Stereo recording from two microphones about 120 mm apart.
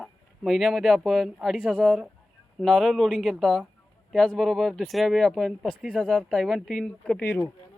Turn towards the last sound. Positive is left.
turn(degrees=20)  # may be behind; listen again after turning